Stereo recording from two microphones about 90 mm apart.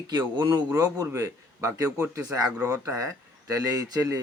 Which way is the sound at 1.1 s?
30° right (ahead or behind).